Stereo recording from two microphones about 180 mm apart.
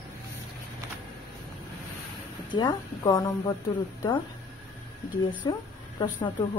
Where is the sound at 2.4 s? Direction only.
25° left (ahead or behind).